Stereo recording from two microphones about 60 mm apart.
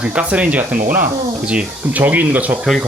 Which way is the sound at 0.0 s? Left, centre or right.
Centre.